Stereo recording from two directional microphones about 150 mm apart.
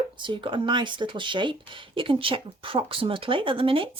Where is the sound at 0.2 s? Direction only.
35° right (ahead or behind).